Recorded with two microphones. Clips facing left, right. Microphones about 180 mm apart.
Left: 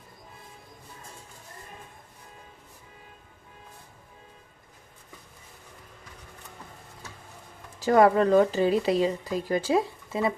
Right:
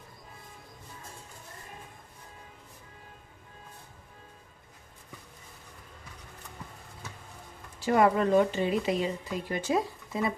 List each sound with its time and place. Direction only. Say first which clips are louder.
7.9 s speech: left 4 dB; 35° left (ahead or behind)